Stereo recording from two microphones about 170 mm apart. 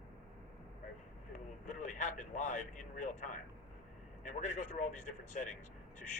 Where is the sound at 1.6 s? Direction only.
45° left (ahead or behind).